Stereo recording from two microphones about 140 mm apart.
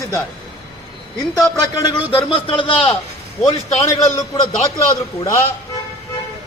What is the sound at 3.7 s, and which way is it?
Speech, 25° left (ahead or behind).